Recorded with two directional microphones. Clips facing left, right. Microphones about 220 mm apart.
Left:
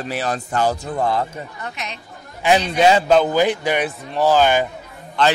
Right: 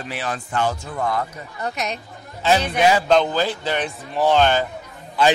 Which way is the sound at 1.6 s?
40° right (ahead or behind).